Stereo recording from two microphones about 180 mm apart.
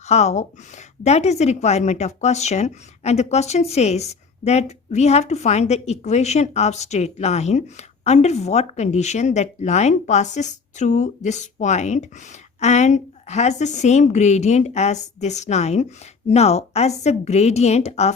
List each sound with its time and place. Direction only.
0.1 s speech: 40° left (ahead or behind)